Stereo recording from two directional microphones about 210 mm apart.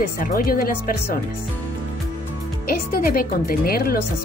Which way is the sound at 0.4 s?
45° left (ahead or behind).